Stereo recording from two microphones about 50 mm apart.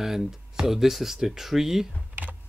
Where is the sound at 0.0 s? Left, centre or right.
Centre.